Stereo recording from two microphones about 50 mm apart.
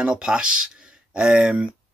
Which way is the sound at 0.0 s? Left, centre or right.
Centre.